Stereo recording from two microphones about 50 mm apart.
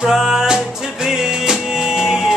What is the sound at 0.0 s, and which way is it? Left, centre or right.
Music, centre.